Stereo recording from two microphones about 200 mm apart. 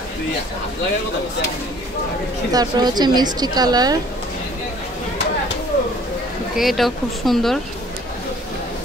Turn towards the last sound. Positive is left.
turn(degrees=0)  # may be behind; listen again after turning